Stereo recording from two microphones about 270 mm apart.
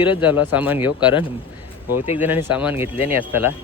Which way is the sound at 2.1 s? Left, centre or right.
Centre.